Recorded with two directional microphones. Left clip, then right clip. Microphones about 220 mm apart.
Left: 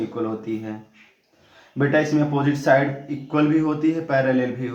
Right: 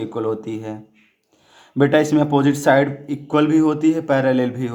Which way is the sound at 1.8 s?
40° right (ahead or behind).